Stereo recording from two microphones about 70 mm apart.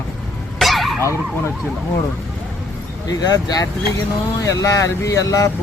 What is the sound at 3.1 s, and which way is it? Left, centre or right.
Speech, left.